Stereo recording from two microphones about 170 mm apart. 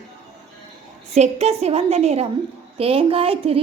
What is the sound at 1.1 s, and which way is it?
A woman's voice, 40° right (ahead or behind).